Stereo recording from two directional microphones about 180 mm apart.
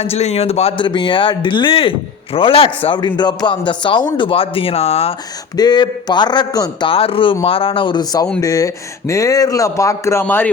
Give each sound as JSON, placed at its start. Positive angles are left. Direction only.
{"t": 0.0, "sound": "speech", "side_deg": 35}
{"t": 5.5, "sound": "a man's voice", "side_deg": 25}